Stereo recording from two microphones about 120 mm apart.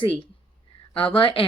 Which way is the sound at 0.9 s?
50° left (ahead or behind).